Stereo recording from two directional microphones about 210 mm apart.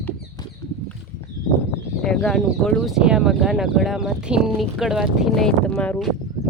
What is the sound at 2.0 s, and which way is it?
A woman's voice, centre (ahead or behind).